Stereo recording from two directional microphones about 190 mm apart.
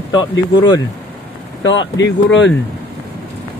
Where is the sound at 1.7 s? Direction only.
75° left (ahead or behind).